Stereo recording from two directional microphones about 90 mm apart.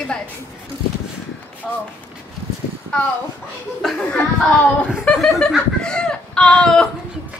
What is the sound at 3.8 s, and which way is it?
Speech, centre (ahead or behind).